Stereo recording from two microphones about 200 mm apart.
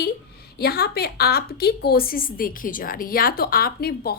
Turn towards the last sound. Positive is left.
turn(degrees=50)  # may be behind; listen again after turning